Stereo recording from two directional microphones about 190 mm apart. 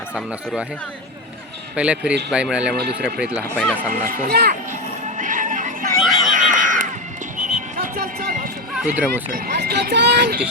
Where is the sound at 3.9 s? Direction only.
50° right (ahead or behind).